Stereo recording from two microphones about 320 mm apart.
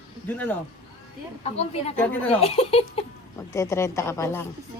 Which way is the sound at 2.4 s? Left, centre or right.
Centre.